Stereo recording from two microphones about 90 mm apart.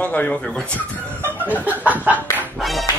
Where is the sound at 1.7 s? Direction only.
20° right (ahead or behind).